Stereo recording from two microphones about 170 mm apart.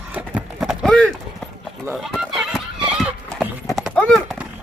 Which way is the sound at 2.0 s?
Centre (ahead or behind).